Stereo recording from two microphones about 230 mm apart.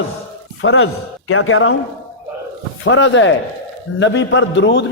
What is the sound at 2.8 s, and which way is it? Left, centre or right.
A man's voice, left.